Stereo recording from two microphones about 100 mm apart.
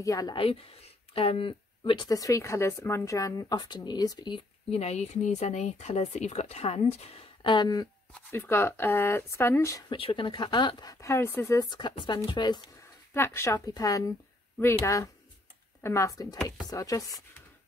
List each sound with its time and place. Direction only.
0.0 s speech: 35° left (ahead or behind)
0.3 s speech: 70° left (ahead or behind)
2.0 s speech: 35° left (ahead or behind)
4.6 s speech: 90° left
7.4 s speech: 45° left (ahead or behind)
8.3 s speech: 20° left (ahead or behind)
9.8 s speech: 60° left (ahead or behind)
11.0 s speech: 30° left (ahead or behind)
11.7 s speech: 55° left (ahead or behind)
13.1 s speech: 25° left (ahead or behind)
13.7 s speech: 35° left (ahead or behind)